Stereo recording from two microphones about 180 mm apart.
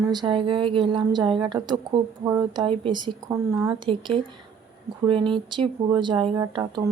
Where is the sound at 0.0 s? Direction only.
25° right (ahead or behind).